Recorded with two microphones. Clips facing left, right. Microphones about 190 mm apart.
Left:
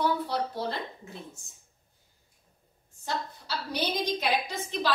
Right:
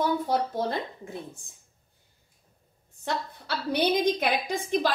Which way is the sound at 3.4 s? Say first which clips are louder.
Right 8 dB; 55° right (ahead or behind).